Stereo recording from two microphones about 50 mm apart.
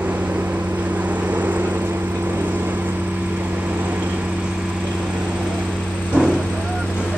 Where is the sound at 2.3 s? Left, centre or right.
Right.